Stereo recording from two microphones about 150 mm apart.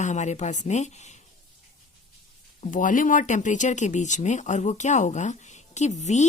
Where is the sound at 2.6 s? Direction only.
60° left (ahead or behind).